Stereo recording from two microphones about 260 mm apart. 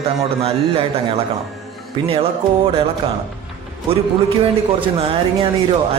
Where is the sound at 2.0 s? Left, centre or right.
Right.